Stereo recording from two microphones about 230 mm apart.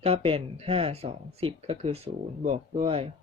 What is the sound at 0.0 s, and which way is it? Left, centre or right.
Speech, right.